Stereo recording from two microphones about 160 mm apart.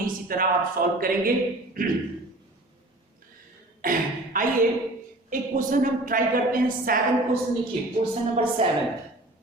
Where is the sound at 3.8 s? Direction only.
60° right (ahead or behind).